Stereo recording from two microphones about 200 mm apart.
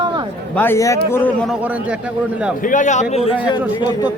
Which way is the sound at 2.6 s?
40° left (ahead or behind).